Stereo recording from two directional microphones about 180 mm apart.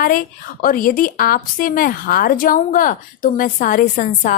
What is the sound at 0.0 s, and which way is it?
A woman's voice, 50° left (ahead or behind).